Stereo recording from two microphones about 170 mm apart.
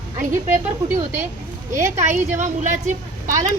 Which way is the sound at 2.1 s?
45° right (ahead or behind).